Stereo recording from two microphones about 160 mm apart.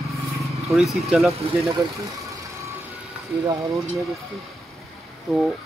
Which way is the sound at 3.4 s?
20° right (ahead or behind).